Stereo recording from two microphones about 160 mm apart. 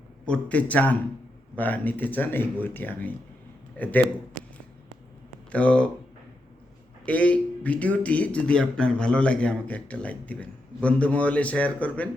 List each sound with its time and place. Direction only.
0.3 s speech: 10° left (ahead or behind)
5.5 s speech: 10° left (ahead or behind)
7.0 s speech: 10° left (ahead or behind)